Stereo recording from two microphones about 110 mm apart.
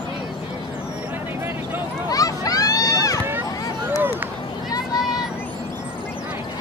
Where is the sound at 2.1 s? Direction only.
35° left (ahead or behind).